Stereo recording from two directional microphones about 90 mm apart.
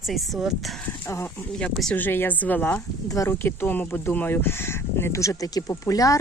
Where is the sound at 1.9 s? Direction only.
20° left (ahead or behind).